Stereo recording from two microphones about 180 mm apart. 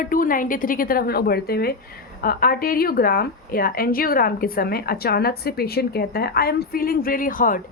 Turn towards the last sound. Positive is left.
turn(degrees=50)  # may be behind; listen again after turning